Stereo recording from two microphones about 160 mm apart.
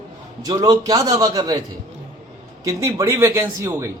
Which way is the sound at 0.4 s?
25° right (ahead or behind).